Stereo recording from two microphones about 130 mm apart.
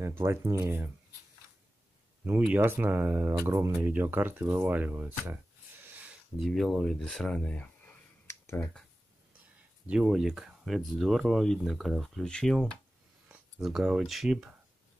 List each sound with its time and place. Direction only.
0.0 s speech: 20° right (ahead or behind)
2.2 s speech: 10° right (ahead or behind)
6.4 s speech: centre (ahead or behind); by 8.6 s 20° left (ahead or behind)
9.8 s speech: 5° right (ahead or behind)